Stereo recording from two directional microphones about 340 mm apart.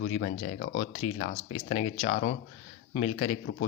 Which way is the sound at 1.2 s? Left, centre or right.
Centre.